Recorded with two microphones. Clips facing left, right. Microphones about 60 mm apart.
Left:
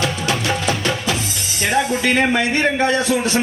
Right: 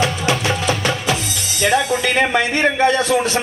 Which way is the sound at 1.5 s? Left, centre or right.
Left.